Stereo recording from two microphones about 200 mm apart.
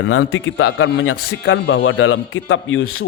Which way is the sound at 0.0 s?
70° left (ahead or behind).